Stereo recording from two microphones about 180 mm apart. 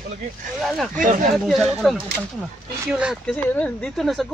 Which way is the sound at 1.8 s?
Centre (ahead or behind).